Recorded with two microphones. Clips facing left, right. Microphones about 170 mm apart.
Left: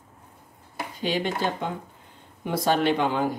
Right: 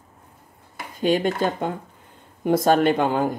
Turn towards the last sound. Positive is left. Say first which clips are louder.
# right 4 dB
turn(degrees=-45)  # may be behind; listen again after turning